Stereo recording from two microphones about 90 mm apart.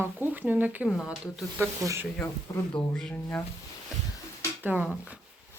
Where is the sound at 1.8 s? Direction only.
35° right (ahead or behind).